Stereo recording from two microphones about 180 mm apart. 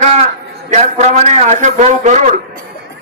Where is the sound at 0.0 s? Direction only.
35° right (ahead or behind).